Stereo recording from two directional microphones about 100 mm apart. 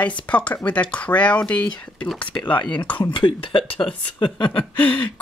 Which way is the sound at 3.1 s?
60° left (ahead or behind).